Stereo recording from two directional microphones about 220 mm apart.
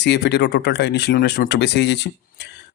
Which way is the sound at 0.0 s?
50° left (ahead or behind).